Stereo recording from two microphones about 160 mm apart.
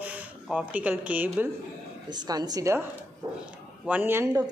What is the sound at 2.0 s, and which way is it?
Speech, 25° right (ahead or behind).